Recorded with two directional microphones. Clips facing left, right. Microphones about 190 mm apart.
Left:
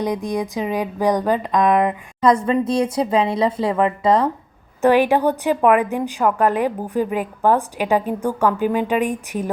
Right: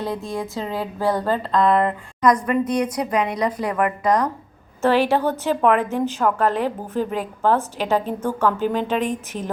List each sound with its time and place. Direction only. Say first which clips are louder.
0.0 s a woman's voice: left 4 dB; 15° left (ahead or behind)
2.2 s a woman's voice: left 2 dB; 25° left (ahead or behind)
4.8 s a woman's voice: left 3 dB; 15° left (ahead or behind)